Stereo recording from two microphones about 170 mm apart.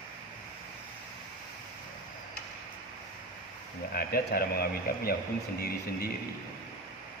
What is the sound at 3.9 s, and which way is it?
A man's voice, 60° left (ahead or behind).